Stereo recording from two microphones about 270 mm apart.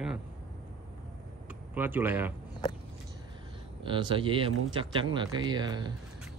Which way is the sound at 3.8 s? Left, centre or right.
Centre.